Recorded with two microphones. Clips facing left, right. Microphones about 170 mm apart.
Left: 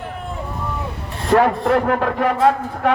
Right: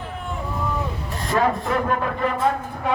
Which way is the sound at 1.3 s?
70° left (ahead or behind).